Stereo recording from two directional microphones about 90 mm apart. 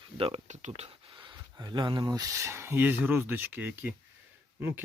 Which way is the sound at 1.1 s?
65° right (ahead or behind).